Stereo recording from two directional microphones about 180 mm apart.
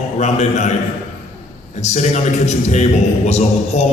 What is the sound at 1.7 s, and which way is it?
A man's voice, 40° left (ahead or behind).